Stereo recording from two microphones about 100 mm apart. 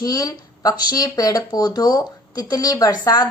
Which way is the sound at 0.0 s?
40° left (ahead or behind).